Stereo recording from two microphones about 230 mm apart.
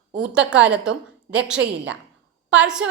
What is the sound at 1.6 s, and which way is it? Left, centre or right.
Speech, right.